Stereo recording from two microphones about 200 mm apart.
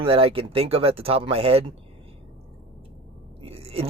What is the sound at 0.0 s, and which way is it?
Speech, 30° right (ahead or behind).